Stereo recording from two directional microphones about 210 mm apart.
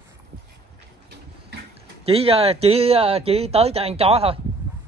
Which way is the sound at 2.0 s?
30° right (ahead or behind).